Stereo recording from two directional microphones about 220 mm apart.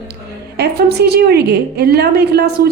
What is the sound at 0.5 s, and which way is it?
A woman's voice, 50° right (ahead or behind).